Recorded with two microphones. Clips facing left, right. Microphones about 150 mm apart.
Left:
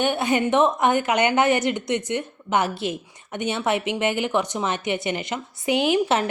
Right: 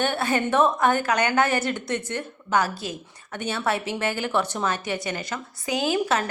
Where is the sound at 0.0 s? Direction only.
15° left (ahead or behind).